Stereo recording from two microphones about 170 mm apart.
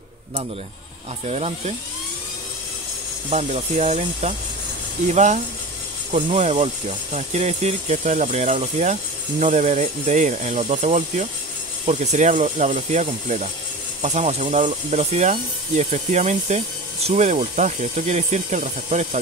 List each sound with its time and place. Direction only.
1.2 s speech: 40° right (ahead or behind)
3.3 s speech: 40° right (ahead or behind)